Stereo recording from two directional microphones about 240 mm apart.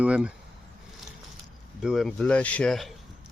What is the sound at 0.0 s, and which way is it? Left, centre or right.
Speech, centre.